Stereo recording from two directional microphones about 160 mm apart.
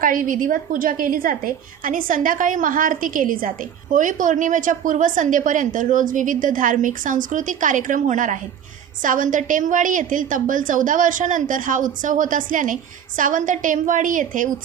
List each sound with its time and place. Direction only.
0.0 s a woman's voice: 60° right (ahead or behind)